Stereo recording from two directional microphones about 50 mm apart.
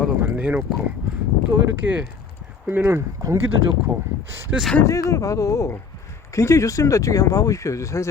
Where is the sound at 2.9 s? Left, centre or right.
Right.